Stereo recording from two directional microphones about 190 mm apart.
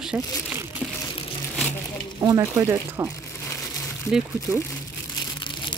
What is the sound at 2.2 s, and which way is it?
Speech, 15° right (ahead or behind).